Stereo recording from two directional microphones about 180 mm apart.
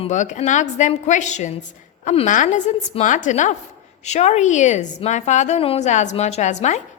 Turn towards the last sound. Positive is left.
turn(degrees=40)  # may be behind; listen again after turning